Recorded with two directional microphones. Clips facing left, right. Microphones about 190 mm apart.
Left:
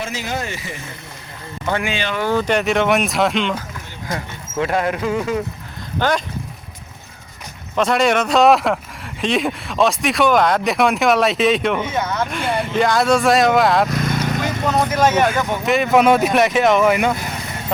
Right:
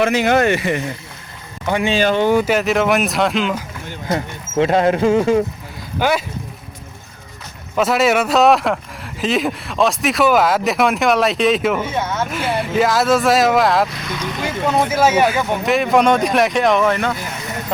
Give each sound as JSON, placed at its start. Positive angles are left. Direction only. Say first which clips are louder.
{"t": 0.0, "sound": "speech", "louder": "right 11 dB", "side_deg": -65}
{"t": 1.6, "sound": "speech", "louder": "right 3 dB", "side_deg": -15}
{"t": 1.9, "sound": "speech", "louder": "right 8 dB", "side_deg": -40}
{"t": 2.1, "sound": "speech", "louder": "right 2 dB", "side_deg": -20}
{"t": 2.4, "sound": "speech", "louder": "right 1 dB", "side_deg": -5}
{"t": 4.1, "sound": "speech", "louder": "right 6 dB", "side_deg": -25}
{"t": 6.0, "sound": "speech", "louder": "right 1 dB", "side_deg": -10}
{"t": 7.8, "sound": "speech", "louder": "right 1 dB", "side_deg": -5}
{"t": 13.9, "sound": "vehicle", "louder": "left 6 dB", "side_deg": 45}
{"t": 14.4, "sound": "speech", "louder": "right 5 dB", "side_deg": -10}